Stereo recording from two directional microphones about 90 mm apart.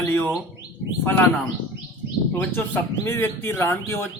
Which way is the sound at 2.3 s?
20° left (ahead or behind).